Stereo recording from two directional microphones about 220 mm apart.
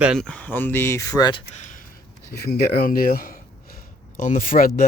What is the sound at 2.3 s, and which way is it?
Speech, 45° left (ahead or behind).